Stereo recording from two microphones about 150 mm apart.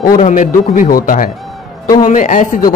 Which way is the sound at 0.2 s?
60° left (ahead or behind).